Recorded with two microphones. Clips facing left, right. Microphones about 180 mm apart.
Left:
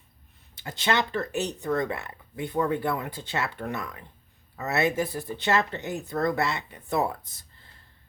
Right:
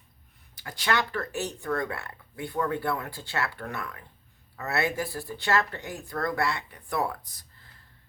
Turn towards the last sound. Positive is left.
turn(degrees=25)  # may be behind; listen again after turning